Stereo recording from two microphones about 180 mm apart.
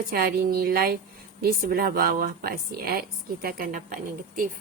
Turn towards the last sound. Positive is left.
turn(degrees=-50)  # may be behind; listen again after turning